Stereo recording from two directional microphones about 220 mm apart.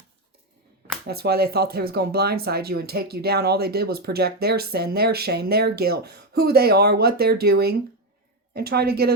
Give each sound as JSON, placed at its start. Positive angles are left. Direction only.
{"t": 1.0, "sound": "speech", "side_deg": -45}